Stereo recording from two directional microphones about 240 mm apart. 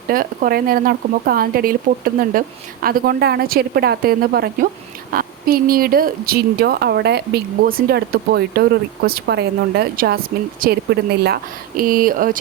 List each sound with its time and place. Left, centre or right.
0.1 s a woman's voice: right
2.8 s a woman's voice: right